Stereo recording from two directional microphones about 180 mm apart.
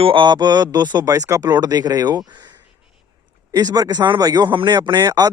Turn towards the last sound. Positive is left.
turn(degrees=-20)  # may be behind; listen again after turning